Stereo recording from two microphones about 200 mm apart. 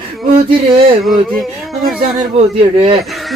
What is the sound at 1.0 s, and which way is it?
Speech, centre (ahead or behind).